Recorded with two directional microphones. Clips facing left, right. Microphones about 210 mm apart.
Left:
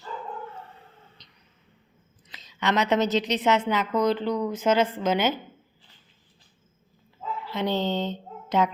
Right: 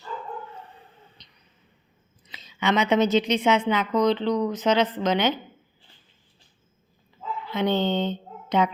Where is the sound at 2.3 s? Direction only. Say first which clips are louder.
Right 2 dB; centre (ahead or behind).